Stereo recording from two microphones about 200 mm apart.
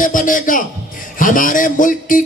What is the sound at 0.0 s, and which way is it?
Music, 40° left (ahead or behind).